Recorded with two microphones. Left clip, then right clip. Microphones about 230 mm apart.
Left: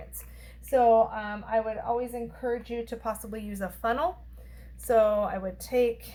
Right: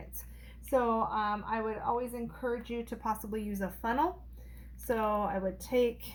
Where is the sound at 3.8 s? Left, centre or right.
Centre.